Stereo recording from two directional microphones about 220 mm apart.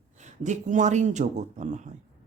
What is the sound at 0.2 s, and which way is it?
Speech, 35° right (ahead or behind).